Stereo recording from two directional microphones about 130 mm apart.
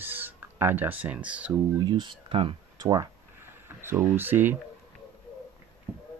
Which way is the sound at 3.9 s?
20° right (ahead or behind).